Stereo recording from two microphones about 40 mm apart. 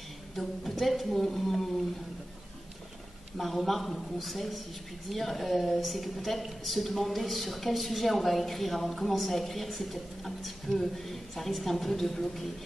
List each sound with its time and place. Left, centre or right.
0.4 s speech: centre
3.3 s speech: centre